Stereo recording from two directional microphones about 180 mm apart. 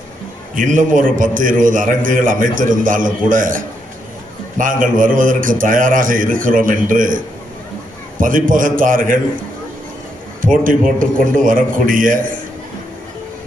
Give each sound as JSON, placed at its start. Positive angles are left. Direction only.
{"t": 0.5, "sound": "a man's voice", "side_deg": -50}
{"t": 8.2, "sound": "a man's voice", "side_deg": -50}
{"t": 10.6, "sound": "a man's voice", "side_deg": -50}